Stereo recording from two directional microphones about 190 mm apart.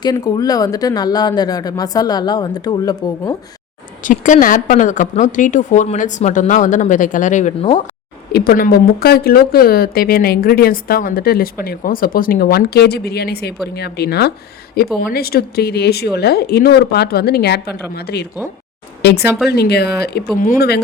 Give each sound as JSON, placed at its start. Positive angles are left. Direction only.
{"t": 0.0, "sound": "a woman's voice", "side_deg": 20}
{"t": 4.0, "sound": "a woman's voice", "side_deg": 45}
{"t": 8.3, "sound": "speech", "side_deg": 55}